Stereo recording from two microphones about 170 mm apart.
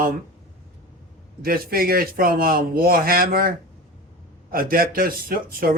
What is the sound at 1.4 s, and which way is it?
A man's voice, 60° right (ahead or behind).